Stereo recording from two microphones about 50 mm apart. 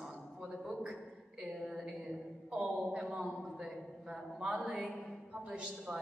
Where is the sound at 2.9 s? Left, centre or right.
Centre.